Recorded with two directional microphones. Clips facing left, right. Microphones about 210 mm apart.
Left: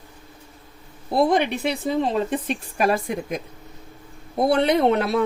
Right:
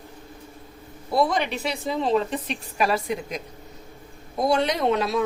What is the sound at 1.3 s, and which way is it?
A woman's voice, 55° left (ahead or behind).